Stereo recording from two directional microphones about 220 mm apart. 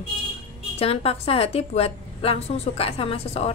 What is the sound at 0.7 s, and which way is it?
A woman's voice, 25° left (ahead or behind).